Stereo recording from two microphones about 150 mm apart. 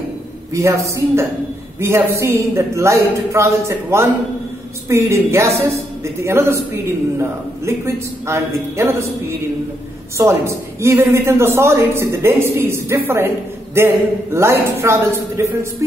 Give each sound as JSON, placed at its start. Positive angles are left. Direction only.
{"t": 0.5, "sound": "a man's voice", "side_deg": -20}
{"t": 10.1, "sound": "a woman's voice", "side_deg": -20}